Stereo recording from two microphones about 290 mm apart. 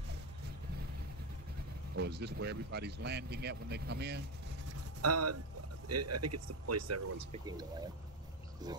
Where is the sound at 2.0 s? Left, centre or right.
Right.